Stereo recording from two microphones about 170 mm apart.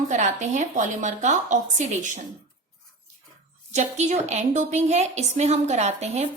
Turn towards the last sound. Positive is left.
turn(degrees=-40)  # may be behind; listen again after turning